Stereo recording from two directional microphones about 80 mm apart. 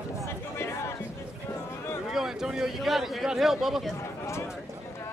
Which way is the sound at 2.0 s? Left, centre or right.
Centre.